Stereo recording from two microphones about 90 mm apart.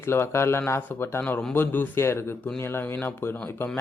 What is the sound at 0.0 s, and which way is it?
Speech, 30° left (ahead or behind).